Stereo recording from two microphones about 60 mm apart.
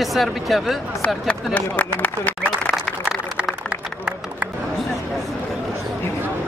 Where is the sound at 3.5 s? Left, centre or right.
Centre.